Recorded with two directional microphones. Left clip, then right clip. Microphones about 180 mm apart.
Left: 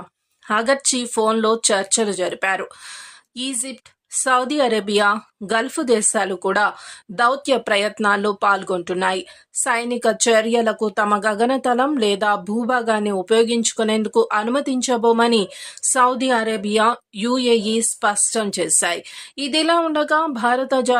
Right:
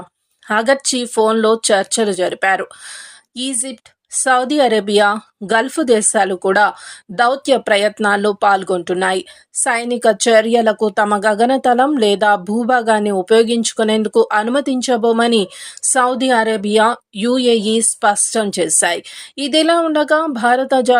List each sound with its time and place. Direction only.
0.4 s a woman's voice: 20° right (ahead or behind)